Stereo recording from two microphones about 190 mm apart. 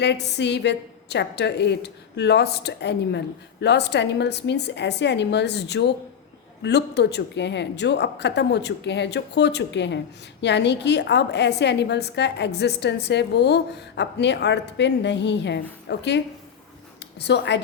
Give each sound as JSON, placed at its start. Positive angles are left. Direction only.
{"t": 0.0, "sound": "a woman's voice", "side_deg": 65}